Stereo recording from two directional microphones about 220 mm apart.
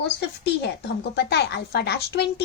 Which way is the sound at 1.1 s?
50° left (ahead or behind).